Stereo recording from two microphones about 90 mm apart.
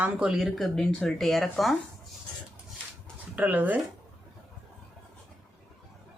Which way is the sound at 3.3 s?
20° right (ahead or behind).